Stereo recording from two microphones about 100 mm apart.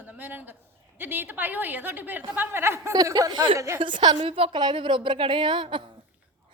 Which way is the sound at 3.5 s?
30° right (ahead or behind).